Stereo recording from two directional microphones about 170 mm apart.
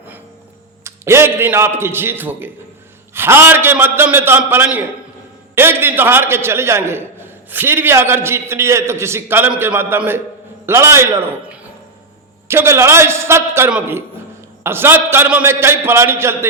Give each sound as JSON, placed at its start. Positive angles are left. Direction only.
{"t": 0.9, "sound": "a man's voice", "side_deg": -15}
{"t": 12.5, "sound": "a man's voice", "side_deg": -15}